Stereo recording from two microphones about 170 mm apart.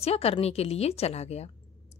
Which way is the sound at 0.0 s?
35° left (ahead or behind).